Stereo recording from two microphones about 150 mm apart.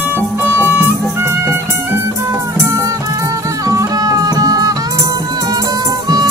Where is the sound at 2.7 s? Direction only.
20° right (ahead or behind).